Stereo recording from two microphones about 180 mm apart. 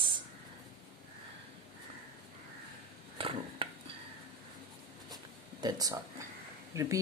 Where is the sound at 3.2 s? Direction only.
30° right (ahead or behind).